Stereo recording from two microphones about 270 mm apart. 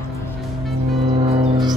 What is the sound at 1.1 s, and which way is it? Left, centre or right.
Music, centre.